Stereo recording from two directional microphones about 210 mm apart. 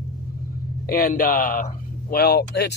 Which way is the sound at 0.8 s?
45° left (ahead or behind).